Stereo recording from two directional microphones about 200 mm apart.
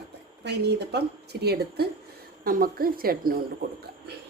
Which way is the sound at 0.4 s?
55° right (ahead or behind).